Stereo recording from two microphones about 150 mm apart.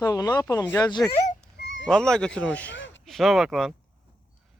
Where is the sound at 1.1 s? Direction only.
50° left (ahead or behind).